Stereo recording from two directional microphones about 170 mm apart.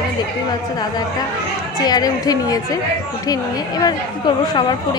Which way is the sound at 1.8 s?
20° left (ahead or behind).